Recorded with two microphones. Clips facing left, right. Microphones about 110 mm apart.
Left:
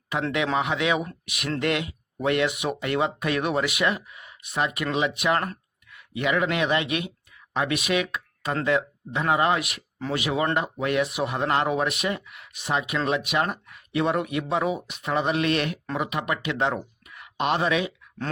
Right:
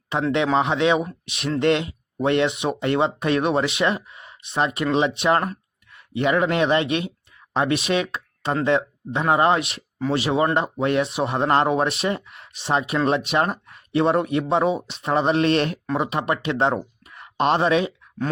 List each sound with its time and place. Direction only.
0.1 s speech: 30° right (ahead or behind)